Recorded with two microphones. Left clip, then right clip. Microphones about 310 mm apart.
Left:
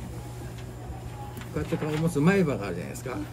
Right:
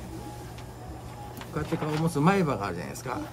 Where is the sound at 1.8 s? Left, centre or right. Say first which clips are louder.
Right 1 dB; centre.